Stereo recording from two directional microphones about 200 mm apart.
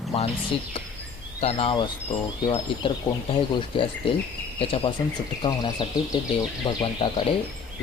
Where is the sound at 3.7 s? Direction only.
25° left (ahead or behind).